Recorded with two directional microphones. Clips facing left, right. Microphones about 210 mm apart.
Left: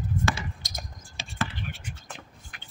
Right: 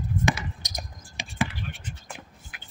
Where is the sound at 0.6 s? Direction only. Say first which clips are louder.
Right 2 dB; 15° right (ahead or behind).